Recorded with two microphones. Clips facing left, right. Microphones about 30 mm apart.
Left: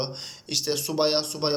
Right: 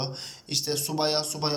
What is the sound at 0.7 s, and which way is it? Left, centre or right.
Speech, left.